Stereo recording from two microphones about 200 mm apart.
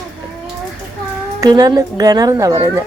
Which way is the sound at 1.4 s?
20° right (ahead or behind).